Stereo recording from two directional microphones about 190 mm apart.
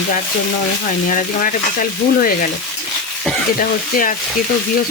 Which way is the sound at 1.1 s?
45° left (ahead or behind).